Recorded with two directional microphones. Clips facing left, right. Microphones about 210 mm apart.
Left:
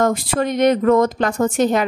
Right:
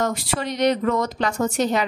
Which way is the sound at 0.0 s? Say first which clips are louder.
Left 6 dB; 50° left (ahead or behind).